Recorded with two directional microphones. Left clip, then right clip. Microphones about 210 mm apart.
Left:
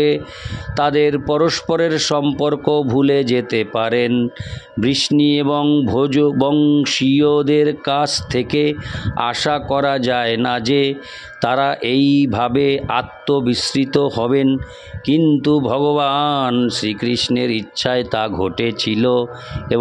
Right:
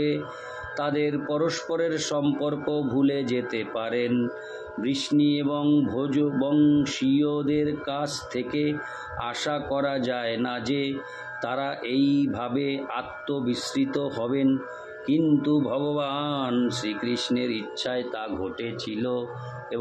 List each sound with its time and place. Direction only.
0.7 s speech: 45° left (ahead or behind)